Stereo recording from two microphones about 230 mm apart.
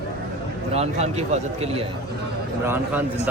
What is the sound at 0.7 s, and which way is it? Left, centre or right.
A man's voice, right.